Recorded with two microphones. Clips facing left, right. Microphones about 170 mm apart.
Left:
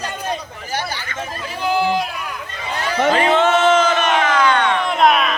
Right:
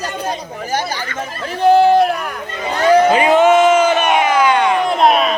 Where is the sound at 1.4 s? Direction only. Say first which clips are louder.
Right 9 dB; 55° right (ahead or behind).